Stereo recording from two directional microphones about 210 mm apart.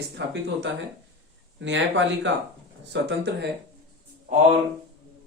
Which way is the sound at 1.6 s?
60° right (ahead or behind).